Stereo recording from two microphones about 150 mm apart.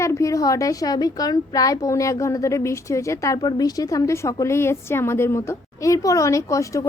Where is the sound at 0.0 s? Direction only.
20° left (ahead or behind).